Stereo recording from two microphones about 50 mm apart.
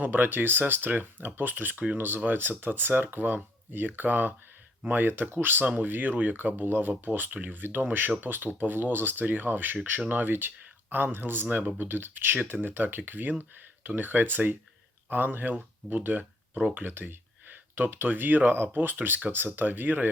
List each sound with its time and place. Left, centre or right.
0.0 s speech: right
16.8 s speech: right